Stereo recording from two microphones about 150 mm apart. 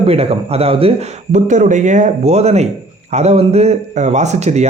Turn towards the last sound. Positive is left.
turn(degrees=-50)  # may be behind; listen again after turning